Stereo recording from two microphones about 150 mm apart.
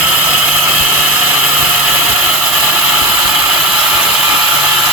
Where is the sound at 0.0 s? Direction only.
10° right (ahead or behind).